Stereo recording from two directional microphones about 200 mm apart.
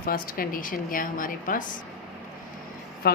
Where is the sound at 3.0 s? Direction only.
50° left (ahead or behind).